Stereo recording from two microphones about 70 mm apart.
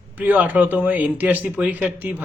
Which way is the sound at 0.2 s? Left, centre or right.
Right.